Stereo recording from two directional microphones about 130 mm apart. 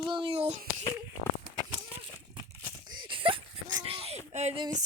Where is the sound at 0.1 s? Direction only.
45° right (ahead or behind).